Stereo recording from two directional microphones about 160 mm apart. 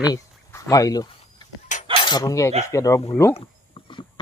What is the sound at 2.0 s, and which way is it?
Speech, 25° left (ahead or behind).